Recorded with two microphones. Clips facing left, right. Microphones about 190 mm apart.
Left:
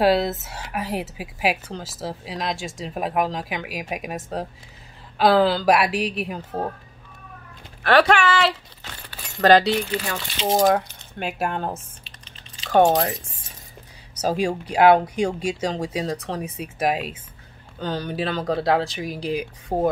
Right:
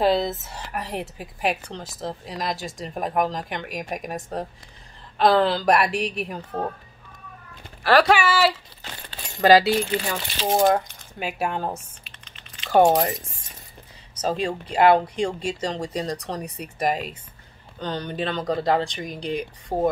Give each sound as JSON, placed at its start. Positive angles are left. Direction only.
{"t": 0.0, "sound": "a woman's voice", "side_deg": 5}
{"t": 7.8, "sound": "a woman's voice", "side_deg": 0}
{"t": 12.0, "sound": "typing", "side_deg": 30}
{"t": 12.6, "sound": "speech", "side_deg": -5}
{"t": 14.2, "sound": "a woman's voice", "side_deg": 10}